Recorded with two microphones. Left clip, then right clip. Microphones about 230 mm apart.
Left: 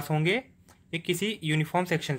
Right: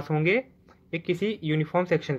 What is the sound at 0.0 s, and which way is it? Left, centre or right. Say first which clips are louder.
Speech: right 3 dB; left.